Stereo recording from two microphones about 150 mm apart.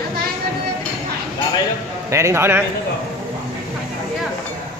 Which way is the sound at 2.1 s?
20° right (ahead or behind).